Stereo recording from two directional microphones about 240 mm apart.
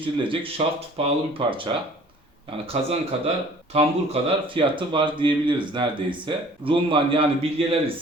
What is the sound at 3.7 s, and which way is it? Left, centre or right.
Speech, right.